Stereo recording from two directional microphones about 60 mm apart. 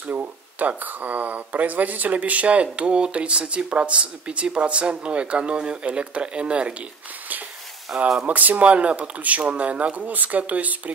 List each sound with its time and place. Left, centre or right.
0.0 s speech: right
7.9 s speech: centre
8.3 s speech: right